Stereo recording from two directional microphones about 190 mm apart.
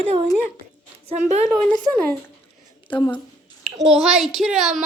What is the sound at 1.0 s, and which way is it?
Speech, 35° right (ahead or behind).